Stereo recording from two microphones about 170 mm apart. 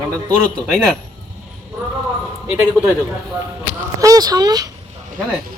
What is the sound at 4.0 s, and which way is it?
Speech, 20° right (ahead or behind).